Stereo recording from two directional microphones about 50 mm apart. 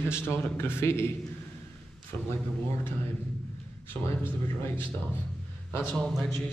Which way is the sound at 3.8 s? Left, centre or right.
Left.